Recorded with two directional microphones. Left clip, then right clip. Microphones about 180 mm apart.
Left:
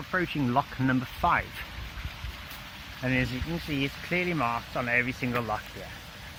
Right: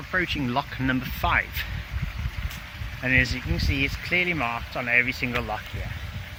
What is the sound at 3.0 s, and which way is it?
Speech, 5° right (ahead or behind).